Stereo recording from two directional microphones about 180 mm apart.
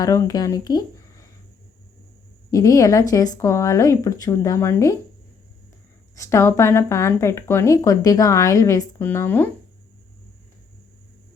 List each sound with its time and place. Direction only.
0.0 s speech: 20° left (ahead or behind)
2.5 s a woman's voice: 20° left (ahead or behind)
6.1 s a woman's voice: 15° left (ahead or behind)